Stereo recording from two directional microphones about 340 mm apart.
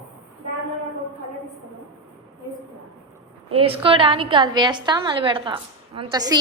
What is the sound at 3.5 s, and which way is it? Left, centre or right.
A woman's voice, centre.